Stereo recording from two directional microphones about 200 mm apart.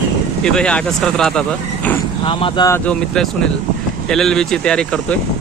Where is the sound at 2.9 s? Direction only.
5° left (ahead or behind).